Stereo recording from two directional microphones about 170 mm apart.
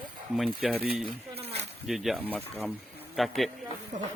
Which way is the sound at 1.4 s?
35° right (ahead or behind).